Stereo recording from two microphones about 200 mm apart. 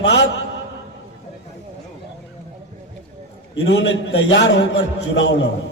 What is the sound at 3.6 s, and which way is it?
A man's voice, 60° left (ahead or behind).